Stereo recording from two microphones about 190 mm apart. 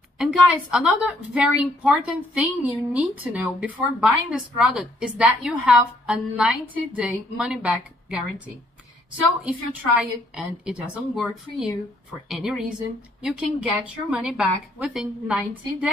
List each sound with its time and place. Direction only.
0.2 s a woman's voice: centre (ahead or behind)
9.4 s a woman's voice: 5° right (ahead or behind)